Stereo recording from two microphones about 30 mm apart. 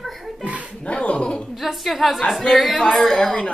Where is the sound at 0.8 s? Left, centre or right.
Left.